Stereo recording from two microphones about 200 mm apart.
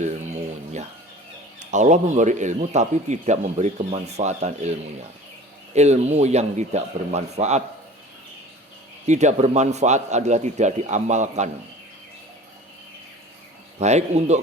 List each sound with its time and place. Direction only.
0.0 s a sound: 35° right (ahead or behind)
1.5 s a man's voice: 35° right (ahead or behind)
9.0 s a man's voice: 35° right (ahead or behind)
13.7 s a man's voice: 35° right (ahead or behind)